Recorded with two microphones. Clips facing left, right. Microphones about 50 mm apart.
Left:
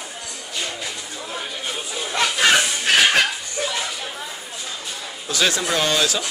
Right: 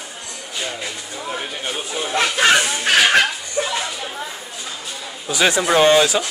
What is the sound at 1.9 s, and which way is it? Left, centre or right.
Chatter, right.